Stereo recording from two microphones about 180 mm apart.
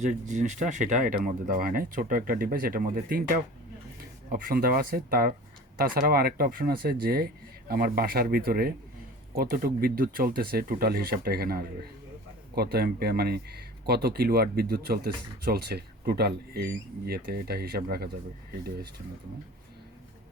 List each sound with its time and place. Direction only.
0.0 s speech: 40° right (ahead or behind); by 18.1 s 60° right (ahead or behind)